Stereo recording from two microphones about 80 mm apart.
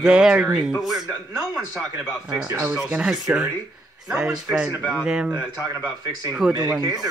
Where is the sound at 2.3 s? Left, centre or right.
Right.